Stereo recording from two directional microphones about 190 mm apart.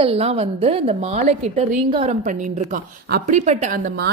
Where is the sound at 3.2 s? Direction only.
40° right (ahead or behind).